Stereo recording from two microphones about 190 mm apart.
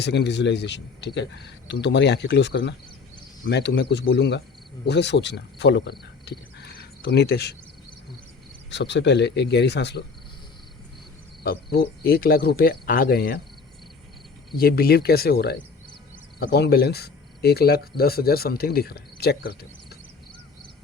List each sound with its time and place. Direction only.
0.0 s speech: 65° left (ahead or behind)
8.7 s speech: 65° left (ahead or behind)
11.4 s speech: 55° left (ahead or behind)
14.5 s speech: 50° left (ahead or behind)